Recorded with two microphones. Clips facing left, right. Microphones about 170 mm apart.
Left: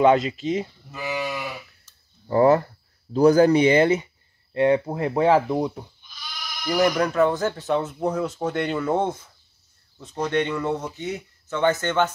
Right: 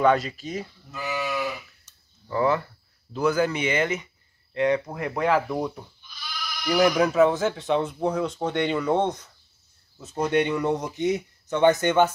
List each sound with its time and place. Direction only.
0.0 s speech: 25° left (ahead or behind)
0.9 s speech: 10° left (ahead or behind)
2.2 s speech: 40° left (ahead or behind); by 5.7 s 25° left (ahead or behind)
6.6 s speech: centre (ahead or behind)
9.9 s speech: 5° right (ahead or behind)